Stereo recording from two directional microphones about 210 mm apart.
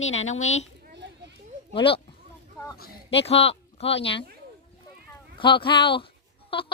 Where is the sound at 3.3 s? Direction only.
30° left (ahead or behind).